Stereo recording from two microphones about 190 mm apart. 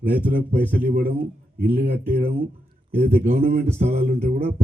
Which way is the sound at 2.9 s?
30° right (ahead or behind).